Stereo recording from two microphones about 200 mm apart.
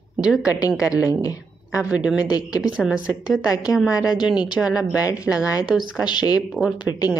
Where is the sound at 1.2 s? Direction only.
15° left (ahead or behind).